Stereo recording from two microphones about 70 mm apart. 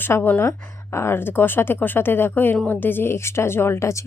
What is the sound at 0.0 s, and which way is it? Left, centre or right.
A woman's voice, left.